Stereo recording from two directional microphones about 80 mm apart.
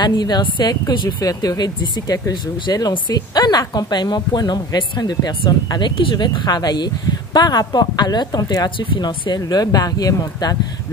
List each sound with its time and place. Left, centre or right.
0.0 s a woman's voice: left
2.3 s a woman's voice: left
8.6 s speech: left
9.4 s speech: left